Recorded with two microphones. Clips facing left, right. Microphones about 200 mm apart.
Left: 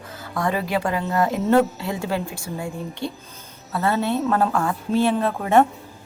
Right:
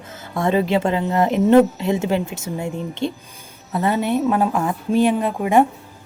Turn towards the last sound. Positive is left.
turn(degrees=-15)  # may be behind; listen again after turning